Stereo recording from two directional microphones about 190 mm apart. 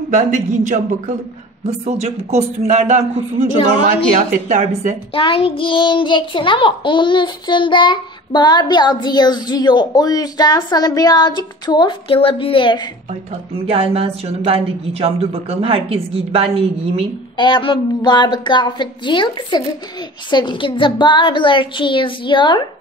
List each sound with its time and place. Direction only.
0.1 s a woman's voice: 40° right (ahead or behind)
4.5 s a woman's voice: 40° right (ahead or behind)
5.1 s child singing: 30° left (ahead or behind)
13.3 s a woman's voice: 30° right (ahead or behind)
17.4 s child singing: 25° left (ahead or behind)